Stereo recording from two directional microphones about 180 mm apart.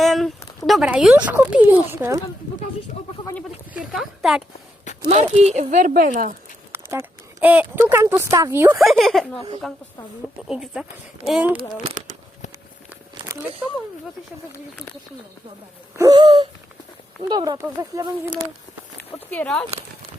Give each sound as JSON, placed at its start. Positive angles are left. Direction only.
{"t": 0.0, "sound": "speech", "side_deg": 0}
{"t": 3.8, "sound": "speech", "side_deg": 0}
{"t": 5.0, "sound": "speech", "side_deg": -35}
{"t": 6.7, "sound": "speech", "side_deg": -15}
{"t": 8.8, "sound": "speech", "side_deg": 0}
{"t": 11.5, "sound": "speech", "side_deg": -40}
{"t": 13.6, "sound": "speech", "side_deg": -5}
{"t": 16.0, "sound": "wheeze", "side_deg": -25}
{"t": 17.2, "sound": "speech", "side_deg": -25}
{"t": 19.3, "sound": "speech", "side_deg": 10}